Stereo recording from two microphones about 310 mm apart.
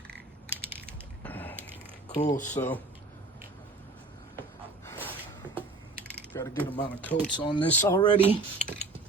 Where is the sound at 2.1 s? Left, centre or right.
Left.